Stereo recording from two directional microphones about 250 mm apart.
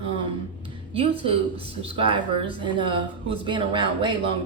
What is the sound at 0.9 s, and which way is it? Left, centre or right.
Speech, right.